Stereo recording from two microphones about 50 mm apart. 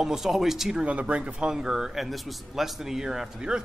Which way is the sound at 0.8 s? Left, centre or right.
Right.